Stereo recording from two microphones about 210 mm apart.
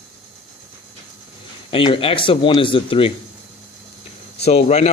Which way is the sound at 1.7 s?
25° left (ahead or behind).